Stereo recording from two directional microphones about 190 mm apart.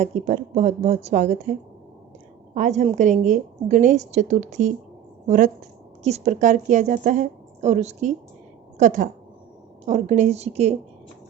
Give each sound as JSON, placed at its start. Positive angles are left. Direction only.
{"t": 0.0, "sound": "a woman's voice", "side_deg": -40}
{"t": 2.6, "sound": "a woman's voice", "side_deg": -40}